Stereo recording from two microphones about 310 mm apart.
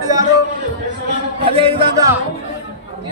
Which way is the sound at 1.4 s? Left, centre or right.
Centre.